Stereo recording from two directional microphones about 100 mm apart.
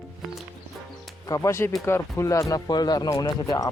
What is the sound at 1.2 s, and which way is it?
Speech, 30° left (ahead or behind).